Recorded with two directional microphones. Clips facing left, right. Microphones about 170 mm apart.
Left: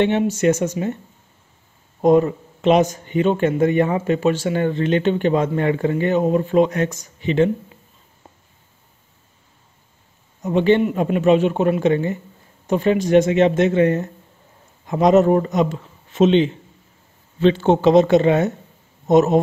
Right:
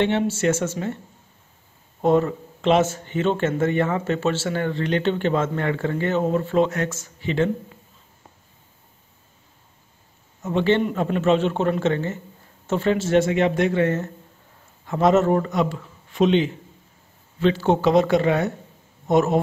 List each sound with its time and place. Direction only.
0.0 s speech: 15° left (ahead or behind)
2.0 s speech: 15° left (ahead or behind)
10.4 s a man's voice: 15° left (ahead or behind)